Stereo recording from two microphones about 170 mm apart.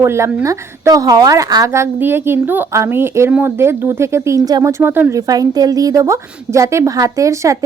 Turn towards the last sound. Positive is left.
turn(degrees=-20)  # may be behind; listen again after turning